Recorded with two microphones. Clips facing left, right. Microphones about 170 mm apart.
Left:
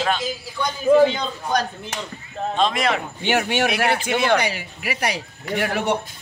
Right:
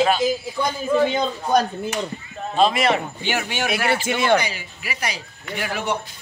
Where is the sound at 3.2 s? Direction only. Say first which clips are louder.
Left 4 dB; 60° left (ahead or behind).